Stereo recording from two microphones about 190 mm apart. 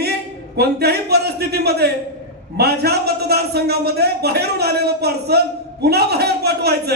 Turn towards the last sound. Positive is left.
turn(degrees=-60)  # may be behind; listen again after turning